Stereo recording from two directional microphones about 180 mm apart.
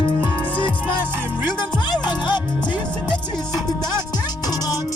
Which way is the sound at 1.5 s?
25° left (ahead or behind).